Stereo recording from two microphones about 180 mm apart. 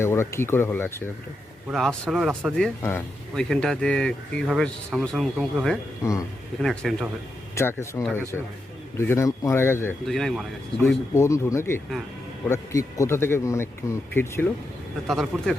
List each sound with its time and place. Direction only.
0.0 s speech: 15° left (ahead or behind)
1.7 s speech: centre (ahead or behind)
6.0 s speech: 15° left (ahead or behind)
6.6 s speech: centre (ahead or behind)
7.5 s speech: 15° left (ahead or behind)
10.1 s speech: centre (ahead or behind)
11.1 s speech: 15° left (ahead or behind)
15.0 s speech: centre (ahead or behind)